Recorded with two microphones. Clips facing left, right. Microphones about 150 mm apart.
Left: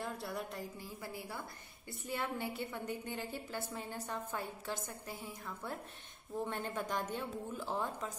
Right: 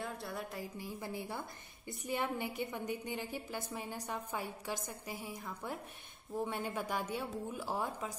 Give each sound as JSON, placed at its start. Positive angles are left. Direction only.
{"t": 0.0, "sound": "music", "side_deg": 0}
{"t": 0.7, "sound": "a woman's voice", "side_deg": -20}